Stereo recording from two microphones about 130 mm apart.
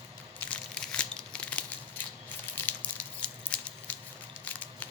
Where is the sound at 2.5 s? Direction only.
10° left (ahead or behind).